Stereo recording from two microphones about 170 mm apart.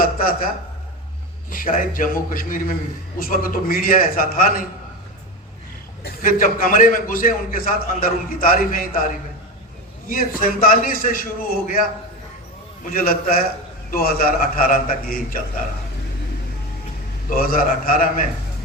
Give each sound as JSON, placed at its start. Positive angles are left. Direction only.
{"t": 0.0, "sound": "a sound", "side_deg": 55}
{"t": 1.5, "sound": "a man's voice", "side_deg": 55}
{"t": 6.0, "sound": "a man's voice", "side_deg": 65}
{"t": 10.1, "sound": "a man's voice", "side_deg": 55}
{"t": 12.8, "sound": "a man's voice", "side_deg": 55}
{"t": 17.2, "sound": "a man's voice", "side_deg": 55}